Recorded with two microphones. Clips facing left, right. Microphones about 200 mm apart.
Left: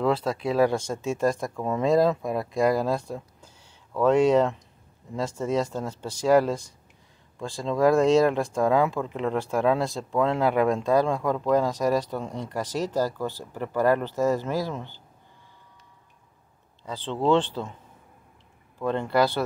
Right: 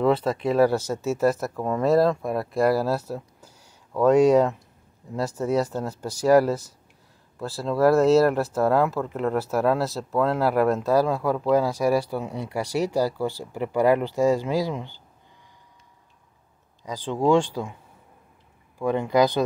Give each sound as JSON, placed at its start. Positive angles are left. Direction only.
{"t": 0.0, "sound": "speech", "side_deg": -5}
{"t": 16.8, "sound": "speech", "side_deg": -10}
{"t": 18.8, "sound": "speech", "side_deg": -10}